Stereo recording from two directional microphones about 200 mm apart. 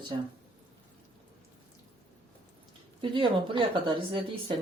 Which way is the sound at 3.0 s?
25° right (ahead or behind).